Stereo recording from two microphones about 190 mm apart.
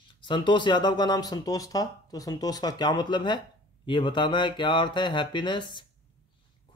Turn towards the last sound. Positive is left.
turn(degrees=25)  # may be behind; listen again after turning